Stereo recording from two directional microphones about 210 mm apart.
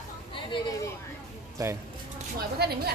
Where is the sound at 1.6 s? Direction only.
15° right (ahead or behind).